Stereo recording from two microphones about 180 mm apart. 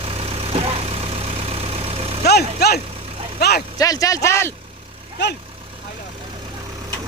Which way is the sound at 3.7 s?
20° left (ahead or behind).